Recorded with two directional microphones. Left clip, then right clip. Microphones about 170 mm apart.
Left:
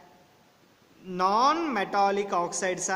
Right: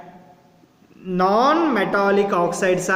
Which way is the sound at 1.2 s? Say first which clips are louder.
Right 7 dB; 60° left (ahead or behind).